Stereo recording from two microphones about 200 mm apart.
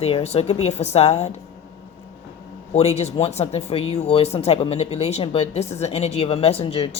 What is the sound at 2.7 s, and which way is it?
Speech, 30° left (ahead or behind).